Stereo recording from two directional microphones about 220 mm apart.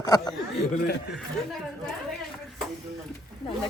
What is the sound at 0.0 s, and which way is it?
Speech, 20° left (ahead or behind).